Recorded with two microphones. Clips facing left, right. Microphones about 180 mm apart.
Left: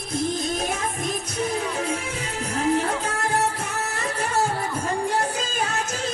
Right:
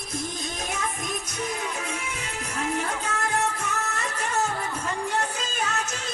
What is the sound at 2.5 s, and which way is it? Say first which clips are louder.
Music: left 6 dB; 35° left (ahead or behind).